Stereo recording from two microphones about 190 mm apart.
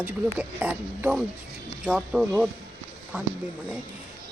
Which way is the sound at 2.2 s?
10° right (ahead or behind).